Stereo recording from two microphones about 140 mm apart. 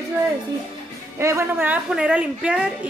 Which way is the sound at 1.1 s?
20° right (ahead or behind).